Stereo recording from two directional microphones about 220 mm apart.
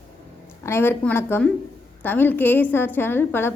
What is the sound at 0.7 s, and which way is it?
A woman's voice, 10° left (ahead or behind).